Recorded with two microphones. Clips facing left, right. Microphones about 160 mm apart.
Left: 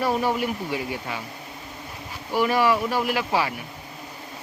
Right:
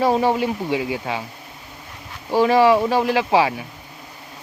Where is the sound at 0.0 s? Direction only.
30° right (ahead or behind).